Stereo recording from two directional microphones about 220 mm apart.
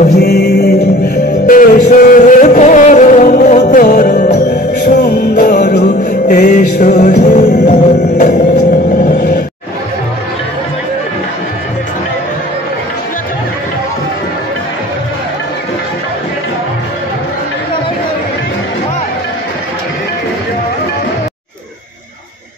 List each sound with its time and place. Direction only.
0.1 s music: 45° left (ahead or behind)
5.8 s music: 35° left (ahead or behind)
9.1 s music: 50° left (ahead or behind)